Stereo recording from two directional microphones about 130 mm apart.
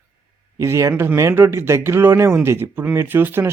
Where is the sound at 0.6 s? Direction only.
25° right (ahead or behind).